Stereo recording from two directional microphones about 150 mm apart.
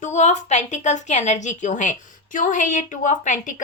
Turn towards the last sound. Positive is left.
turn(degrees=55)  # may be behind; listen again after turning